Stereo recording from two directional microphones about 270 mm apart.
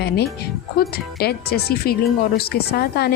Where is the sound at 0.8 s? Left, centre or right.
Left.